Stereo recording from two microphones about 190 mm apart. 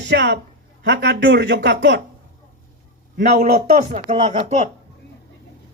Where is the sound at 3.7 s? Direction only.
40° right (ahead or behind).